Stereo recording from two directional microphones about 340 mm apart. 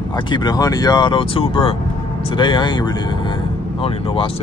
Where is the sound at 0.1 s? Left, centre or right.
Centre.